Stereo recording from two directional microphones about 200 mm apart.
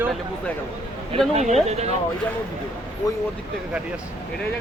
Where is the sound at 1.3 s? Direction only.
35° right (ahead or behind).